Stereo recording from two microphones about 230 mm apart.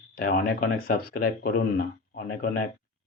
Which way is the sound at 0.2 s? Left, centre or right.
Left.